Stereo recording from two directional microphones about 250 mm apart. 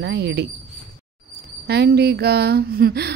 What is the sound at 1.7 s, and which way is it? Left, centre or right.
A woman's voice, right.